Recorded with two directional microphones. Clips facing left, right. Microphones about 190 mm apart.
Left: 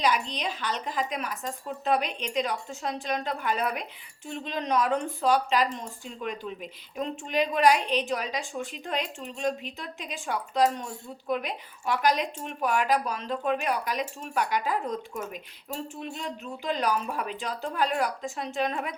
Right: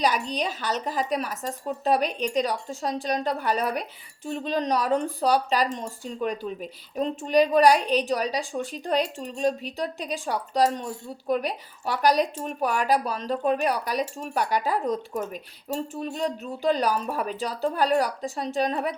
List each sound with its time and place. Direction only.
0.0 s speech: 40° right (ahead or behind)